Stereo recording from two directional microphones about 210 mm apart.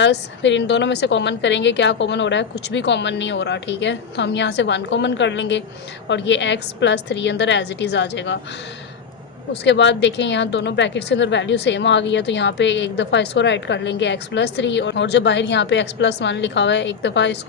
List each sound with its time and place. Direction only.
0.0 s a woman's voice: 60° left (ahead or behind)
9.5 s a woman's voice: 55° left (ahead or behind)